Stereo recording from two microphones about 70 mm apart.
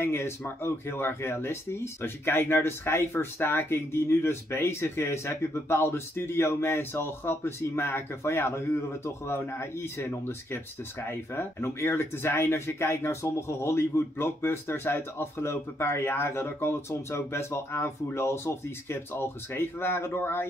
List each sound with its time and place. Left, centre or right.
0.0 s speech: left